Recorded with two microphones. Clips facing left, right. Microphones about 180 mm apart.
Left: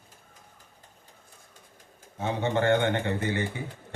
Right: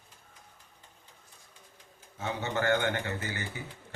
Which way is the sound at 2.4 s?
30° left (ahead or behind).